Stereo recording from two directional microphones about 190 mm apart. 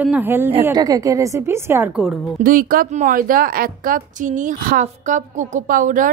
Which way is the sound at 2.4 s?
45° right (ahead or behind).